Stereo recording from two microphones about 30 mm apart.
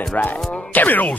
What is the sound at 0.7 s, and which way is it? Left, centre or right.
Speech, left.